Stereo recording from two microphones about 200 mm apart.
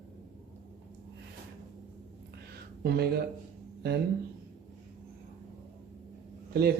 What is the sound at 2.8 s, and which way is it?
Speech, 55° right (ahead or behind).